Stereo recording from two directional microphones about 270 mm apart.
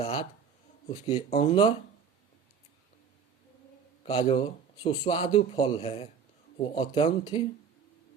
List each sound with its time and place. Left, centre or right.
0.0 s speech: centre
4.0 s speech: left